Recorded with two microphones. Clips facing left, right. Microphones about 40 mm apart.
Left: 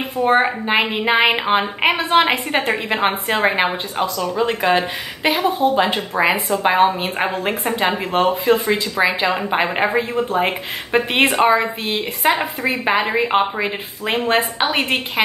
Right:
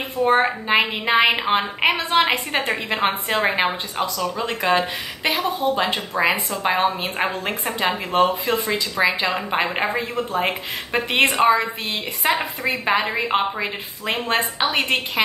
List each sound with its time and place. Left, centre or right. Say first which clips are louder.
0.2 s speech: left 2 dB; centre
2.0 s a woman's voice: left 3 dB; left
2.6 s speech: left 3 dB; centre